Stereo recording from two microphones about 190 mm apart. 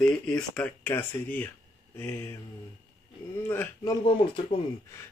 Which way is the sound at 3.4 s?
15° left (ahead or behind).